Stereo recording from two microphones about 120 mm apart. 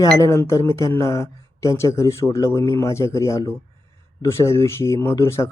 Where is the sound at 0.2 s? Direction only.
20° left (ahead or behind).